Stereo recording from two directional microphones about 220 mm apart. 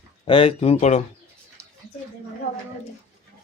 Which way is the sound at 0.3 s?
25° left (ahead or behind).